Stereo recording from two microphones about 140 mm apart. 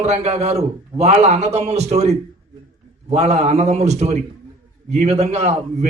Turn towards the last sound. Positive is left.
turn(degrees=-50)  # may be behind; listen again after turning